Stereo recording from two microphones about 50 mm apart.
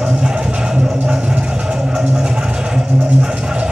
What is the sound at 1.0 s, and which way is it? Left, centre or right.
Vehicle, right.